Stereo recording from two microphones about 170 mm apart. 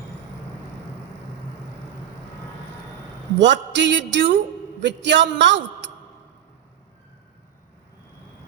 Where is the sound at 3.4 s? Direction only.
90° right.